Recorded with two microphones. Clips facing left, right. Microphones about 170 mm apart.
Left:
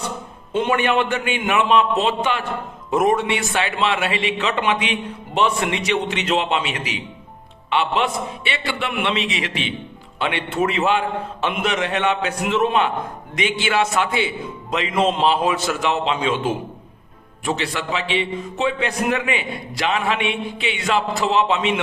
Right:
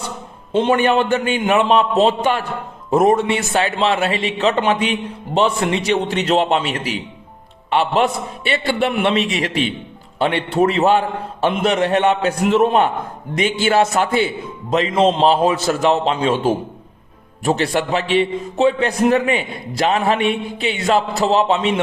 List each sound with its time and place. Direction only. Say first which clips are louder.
0.5 s a man's voice: right 4 dB; 30° right (ahead or behind)